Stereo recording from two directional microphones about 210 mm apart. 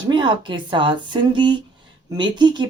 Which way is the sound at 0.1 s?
20° right (ahead or behind).